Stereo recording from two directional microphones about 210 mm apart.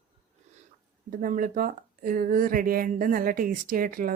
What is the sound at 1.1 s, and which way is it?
Speech, 40° right (ahead or behind).